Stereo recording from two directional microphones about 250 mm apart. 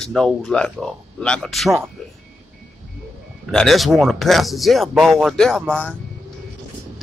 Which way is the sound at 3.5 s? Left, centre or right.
Centre.